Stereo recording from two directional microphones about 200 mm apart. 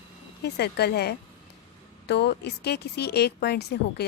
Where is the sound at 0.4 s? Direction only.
55° left (ahead or behind).